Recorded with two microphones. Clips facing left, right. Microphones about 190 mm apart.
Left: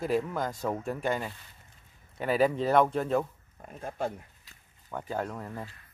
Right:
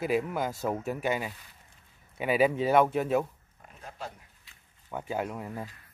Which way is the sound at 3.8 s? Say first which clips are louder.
Left 8 dB; 50° left (ahead or behind).